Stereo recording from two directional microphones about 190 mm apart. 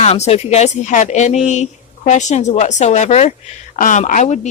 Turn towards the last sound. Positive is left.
turn(degrees=40)  # may be behind; listen again after turning